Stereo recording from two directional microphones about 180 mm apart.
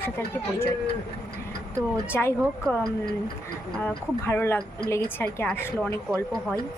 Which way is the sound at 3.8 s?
10° left (ahead or behind).